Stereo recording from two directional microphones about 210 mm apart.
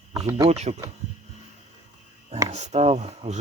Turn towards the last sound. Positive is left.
turn(degrees=-30)  # may be behind; listen again after turning